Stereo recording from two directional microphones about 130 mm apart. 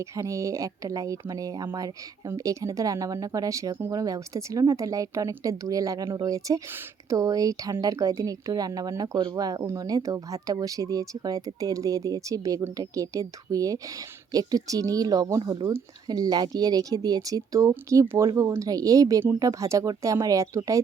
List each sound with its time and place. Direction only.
0.0 s speech: 25° right (ahead or behind)